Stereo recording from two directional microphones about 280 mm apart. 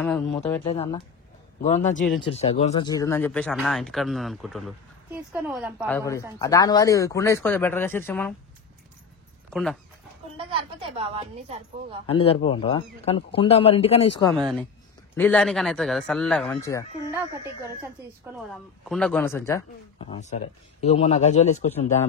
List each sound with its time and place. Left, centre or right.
0.0 s speech: centre
0.7 s speech: left; by 5.9 s centre
5.9 s speech: centre
9.5 s speech: centre
10.3 s speech: centre
12.1 s speech: centre
15.1 s speech: centre
18.5 s speech: centre
20.0 s speech: left